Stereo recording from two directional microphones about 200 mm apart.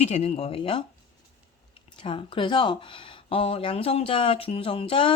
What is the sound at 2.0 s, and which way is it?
Speech, 25° left (ahead or behind).